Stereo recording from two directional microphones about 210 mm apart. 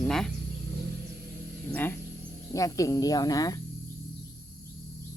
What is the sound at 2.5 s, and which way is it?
Speech, 15° left (ahead or behind).